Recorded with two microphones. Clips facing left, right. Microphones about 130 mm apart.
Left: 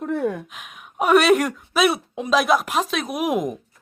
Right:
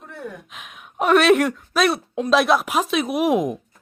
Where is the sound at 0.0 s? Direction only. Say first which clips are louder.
Left 12 dB; 90° left.